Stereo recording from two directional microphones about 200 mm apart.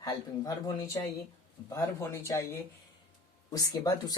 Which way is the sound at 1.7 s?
15° left (ahead or behind).